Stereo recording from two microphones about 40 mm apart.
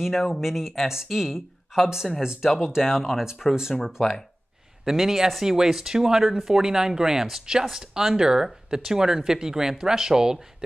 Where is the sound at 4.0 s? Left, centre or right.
Centre.